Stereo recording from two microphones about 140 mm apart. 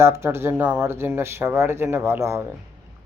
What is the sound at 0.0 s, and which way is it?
Speech, 20° right (ahead or behind).